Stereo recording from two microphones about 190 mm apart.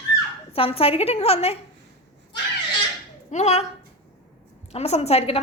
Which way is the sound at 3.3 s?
35° left (ahead or behind).